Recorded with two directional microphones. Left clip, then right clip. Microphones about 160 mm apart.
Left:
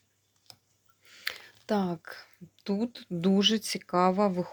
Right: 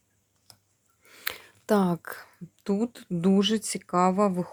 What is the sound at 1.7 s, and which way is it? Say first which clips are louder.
A woman's voice: right 6 dB; 30° right (ahead or behind).